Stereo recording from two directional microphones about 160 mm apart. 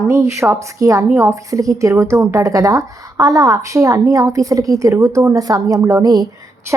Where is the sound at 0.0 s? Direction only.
20° right (ahead or behind).